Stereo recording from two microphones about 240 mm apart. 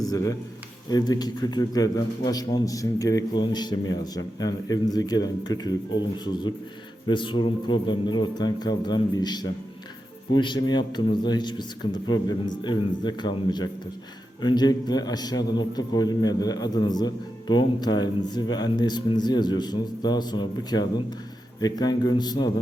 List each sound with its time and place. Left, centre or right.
0.0 s a man's voice: centre